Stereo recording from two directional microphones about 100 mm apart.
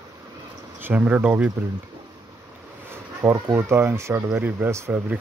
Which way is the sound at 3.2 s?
30° right (ahead or behind).